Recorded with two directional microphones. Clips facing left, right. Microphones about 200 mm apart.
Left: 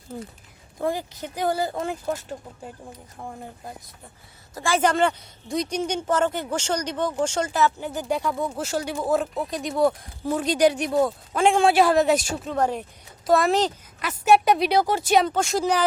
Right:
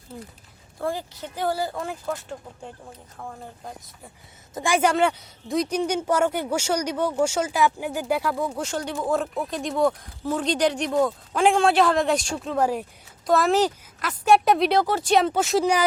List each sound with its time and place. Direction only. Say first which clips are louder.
0.8 s speech: left 2 dB; 15° left (ahead or behind)
3.2 s speech: left 1 dB; 20° left (ahead or behind)
4.5 s a woman's voice: right 1 dB; 15° right (ahead or behind); by 12.5 s 5° left (ahead or behind)
12.5 s a woman's voice: right 1 dB; 10° right (ahead or behind)
14.8 s speech: even; 10° left (ahead or behind)
15.3 s speech: right 2 dB; 5° right (ahead or behind)